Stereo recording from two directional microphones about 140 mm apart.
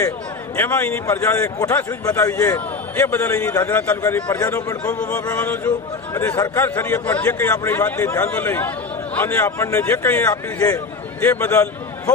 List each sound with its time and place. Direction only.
0.5 s a man's voice: 15° left (ahead or behind)
5.2 s a sound: 20° left (ahead or behind)
6.5 s a man's voice: 15° left (ahead or behind)